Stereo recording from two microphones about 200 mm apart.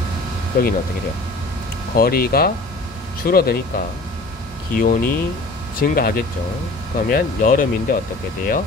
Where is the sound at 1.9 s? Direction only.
50° left (ahead or behind).